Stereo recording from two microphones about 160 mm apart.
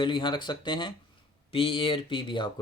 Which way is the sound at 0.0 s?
30° left (ahead or behind).